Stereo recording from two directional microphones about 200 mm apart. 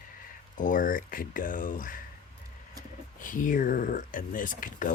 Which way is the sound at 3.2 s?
40° left (ahead or behind).